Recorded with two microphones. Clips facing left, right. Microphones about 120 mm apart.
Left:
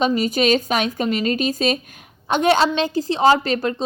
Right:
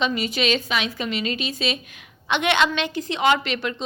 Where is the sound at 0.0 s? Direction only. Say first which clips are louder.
Left 5 dB; 45° left (ahead or behind).